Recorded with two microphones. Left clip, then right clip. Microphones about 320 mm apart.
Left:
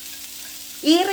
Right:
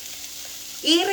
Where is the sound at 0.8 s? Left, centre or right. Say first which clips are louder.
Left 2 dB; centre.